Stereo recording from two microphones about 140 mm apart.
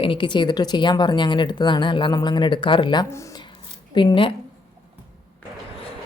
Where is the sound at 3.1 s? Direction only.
20° left (ahead or behind).